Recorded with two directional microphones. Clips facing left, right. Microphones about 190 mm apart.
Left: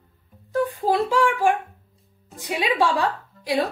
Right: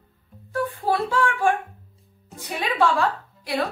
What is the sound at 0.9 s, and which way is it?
A woman's voice, 15° left (ahead or behind).